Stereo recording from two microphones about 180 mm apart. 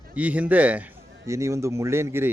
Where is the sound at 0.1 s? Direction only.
10° right (ahead or behind).